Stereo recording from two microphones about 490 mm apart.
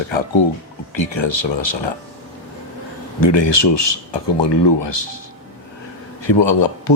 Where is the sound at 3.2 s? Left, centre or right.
Left.